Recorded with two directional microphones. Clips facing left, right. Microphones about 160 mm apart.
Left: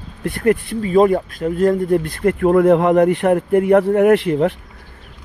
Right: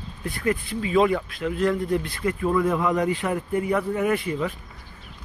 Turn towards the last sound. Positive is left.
turn(degrees=65)  # may be behind; listen again after turning